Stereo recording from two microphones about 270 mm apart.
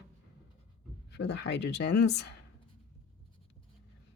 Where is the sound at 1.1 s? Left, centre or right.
Left.